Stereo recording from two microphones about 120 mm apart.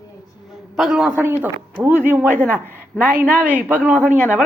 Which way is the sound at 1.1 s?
20° right (ahead or behind).